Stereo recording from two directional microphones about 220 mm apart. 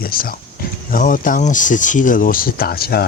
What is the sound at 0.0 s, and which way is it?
Speech, 40° left (ahead or behind).